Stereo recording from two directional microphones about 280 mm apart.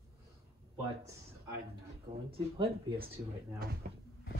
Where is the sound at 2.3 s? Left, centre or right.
Centre.